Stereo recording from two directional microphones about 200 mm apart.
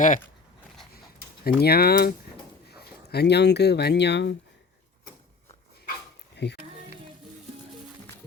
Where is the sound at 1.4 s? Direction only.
50° left (ahead or behind).